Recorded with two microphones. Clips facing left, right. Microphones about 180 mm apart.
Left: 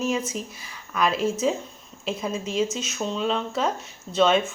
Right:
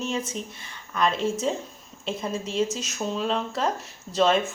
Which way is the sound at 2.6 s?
35° right (ahead or behind).